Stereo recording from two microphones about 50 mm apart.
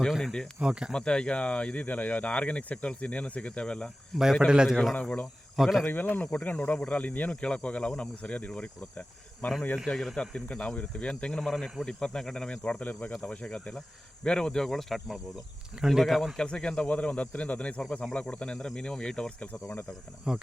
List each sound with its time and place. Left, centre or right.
0.2 s speech: centre
0.6 s speech: centre
0.9 s speech: centre
4.1 s speech: centre
4.4 s speech: centre
5.8 s speech: left
9.7 s speech: centre
12.7 s speech: left
13.2 s speech: left; by 16.3 s centre
16.4 s speech: centre
20.3 s speech: centre